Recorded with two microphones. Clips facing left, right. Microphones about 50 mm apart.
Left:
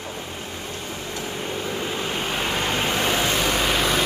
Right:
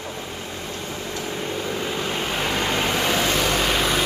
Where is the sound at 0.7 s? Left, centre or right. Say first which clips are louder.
Right 1 dB; centre.